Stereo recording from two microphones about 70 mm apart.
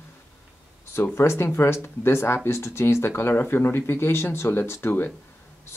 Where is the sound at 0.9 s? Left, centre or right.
Left.